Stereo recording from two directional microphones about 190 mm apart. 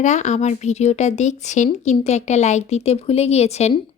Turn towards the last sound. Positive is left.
turn(degrees=35)  # may be behind; listen again after turning